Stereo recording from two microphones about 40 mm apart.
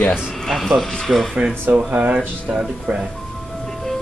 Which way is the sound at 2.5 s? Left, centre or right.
Right.